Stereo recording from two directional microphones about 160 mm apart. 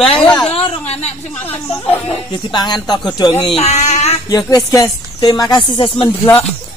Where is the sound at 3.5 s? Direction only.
45° left (ahead or behind).